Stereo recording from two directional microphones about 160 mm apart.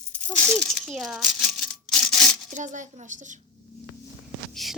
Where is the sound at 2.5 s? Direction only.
50° right (ahead or behind).